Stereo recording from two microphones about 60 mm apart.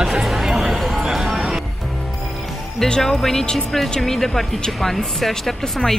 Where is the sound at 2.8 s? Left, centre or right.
Centre.